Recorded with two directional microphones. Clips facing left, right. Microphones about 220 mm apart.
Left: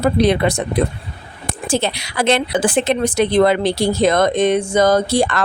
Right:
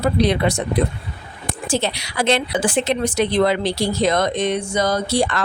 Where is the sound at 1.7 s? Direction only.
55° left (ahead or behind).